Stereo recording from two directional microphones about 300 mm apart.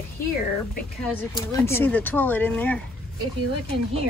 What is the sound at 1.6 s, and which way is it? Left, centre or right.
Speech, centre.